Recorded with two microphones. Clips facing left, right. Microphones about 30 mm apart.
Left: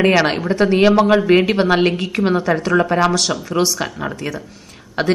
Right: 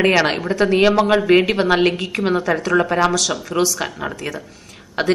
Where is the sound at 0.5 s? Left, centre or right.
Left.